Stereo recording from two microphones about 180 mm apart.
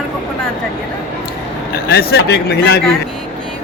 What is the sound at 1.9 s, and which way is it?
Speech, 65° left (ahead or behind).